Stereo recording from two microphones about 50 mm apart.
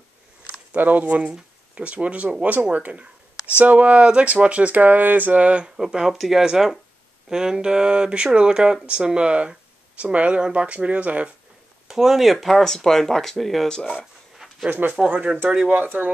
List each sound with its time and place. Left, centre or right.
0.7 s speech: right
5.8 s speech: centre; by 11.3 s right
11.9 s speech: centre
12.6 s speech: centre
13.7 s speech: centre
13.9 s a sound: centre
15.3 s speech: right